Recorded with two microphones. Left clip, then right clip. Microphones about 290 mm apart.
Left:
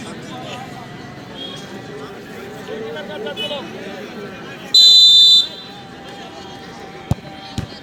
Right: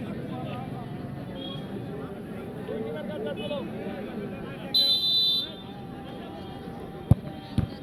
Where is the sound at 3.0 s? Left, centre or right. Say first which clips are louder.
Left 8 dB; left.